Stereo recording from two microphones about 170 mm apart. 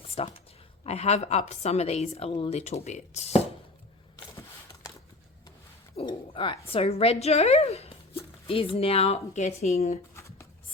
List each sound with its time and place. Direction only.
0.2 s a woman's voice: 35° left (ahead or behind)
6.0 s speech: 30° left (ahead or behind)
10.2 s a sound: 15° left (ahead or behind)